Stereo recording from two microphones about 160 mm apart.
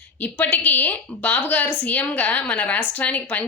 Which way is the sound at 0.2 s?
10° left (ahead or behind).